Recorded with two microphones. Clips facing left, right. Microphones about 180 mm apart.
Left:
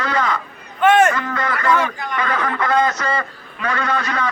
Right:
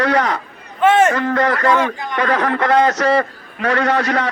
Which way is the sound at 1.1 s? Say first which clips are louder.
Right 6 dB; 65° right (ahead or behind).